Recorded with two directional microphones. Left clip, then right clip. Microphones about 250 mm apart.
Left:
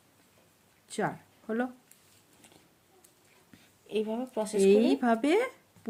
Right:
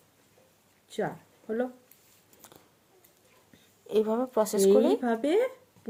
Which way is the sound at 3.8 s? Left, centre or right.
Right.